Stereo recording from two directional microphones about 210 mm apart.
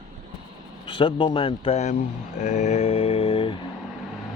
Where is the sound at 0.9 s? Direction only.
25° left (ahead or behind).